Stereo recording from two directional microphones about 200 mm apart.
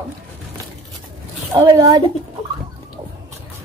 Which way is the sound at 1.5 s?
20° right (ahead or behind).